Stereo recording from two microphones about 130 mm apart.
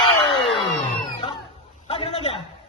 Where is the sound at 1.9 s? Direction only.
50° left (ahead or behind).